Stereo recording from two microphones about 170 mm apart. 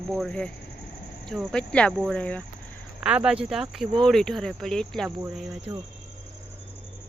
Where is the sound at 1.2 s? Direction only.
5° left (ahead or behind).